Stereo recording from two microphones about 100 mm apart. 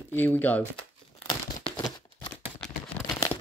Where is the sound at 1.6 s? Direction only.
50° left (ahead or behind).